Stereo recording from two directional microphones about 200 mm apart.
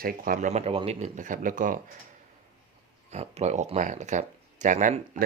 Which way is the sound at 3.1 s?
35° right (ahead or behind).